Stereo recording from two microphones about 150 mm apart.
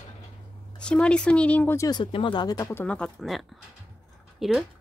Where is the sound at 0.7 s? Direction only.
5° left (ahead or behind).